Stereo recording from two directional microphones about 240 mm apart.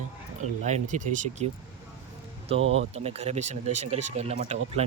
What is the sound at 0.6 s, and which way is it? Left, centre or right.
Speech, right.